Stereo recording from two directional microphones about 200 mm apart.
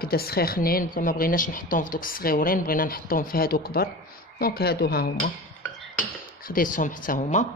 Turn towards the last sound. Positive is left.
turn(degrees=40)  # may be behind; listen again after turning